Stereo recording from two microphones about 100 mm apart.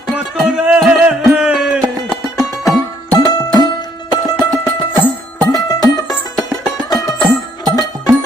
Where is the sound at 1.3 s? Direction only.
5° right (ahead or behind).